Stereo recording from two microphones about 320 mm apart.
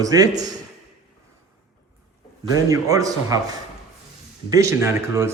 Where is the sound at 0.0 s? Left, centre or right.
Centre.